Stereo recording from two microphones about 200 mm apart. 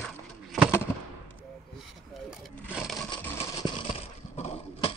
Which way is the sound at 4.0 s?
30° left (ahead or behind).